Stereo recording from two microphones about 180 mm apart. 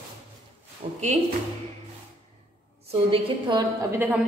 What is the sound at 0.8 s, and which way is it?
Speech, 40° right (ahead or behind).